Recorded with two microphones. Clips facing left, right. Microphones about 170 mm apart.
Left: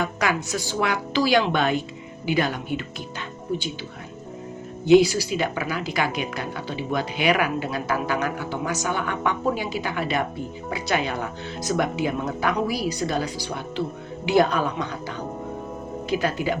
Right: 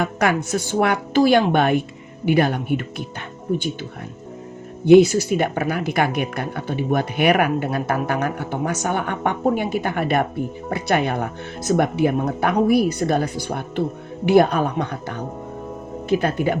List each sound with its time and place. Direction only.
0.0 s speech: 55° right (ahead or behind)
4.9 s speech: 55° right (ahead or behind)